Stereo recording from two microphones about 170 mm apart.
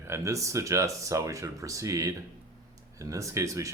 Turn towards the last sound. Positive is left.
turn(degrees=-20)  # may be behind; listen again after turning